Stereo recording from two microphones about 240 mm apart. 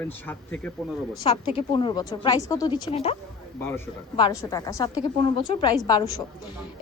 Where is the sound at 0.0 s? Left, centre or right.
Centre.